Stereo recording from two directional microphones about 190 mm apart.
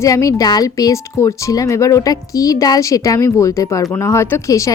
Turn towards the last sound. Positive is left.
turn(degrees=15)  # may be behind; listen again after turning